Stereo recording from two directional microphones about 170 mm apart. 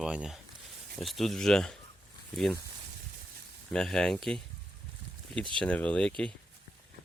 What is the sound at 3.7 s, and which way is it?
Speech, 5° left (ahead or behind).